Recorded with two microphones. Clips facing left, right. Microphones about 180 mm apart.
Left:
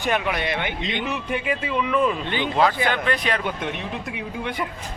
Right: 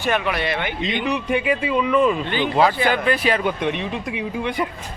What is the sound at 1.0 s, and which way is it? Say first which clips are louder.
Speech: right 7 dB; centre (ahead or behind).